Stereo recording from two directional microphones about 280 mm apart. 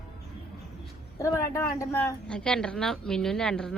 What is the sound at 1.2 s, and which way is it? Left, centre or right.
Speech, centre.